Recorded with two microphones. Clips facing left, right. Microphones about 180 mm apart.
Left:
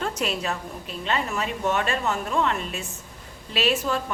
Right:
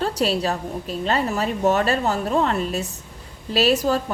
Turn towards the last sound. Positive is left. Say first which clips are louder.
# right 5 dB
turn(degrees=-40)  # may be behind; listen again after turning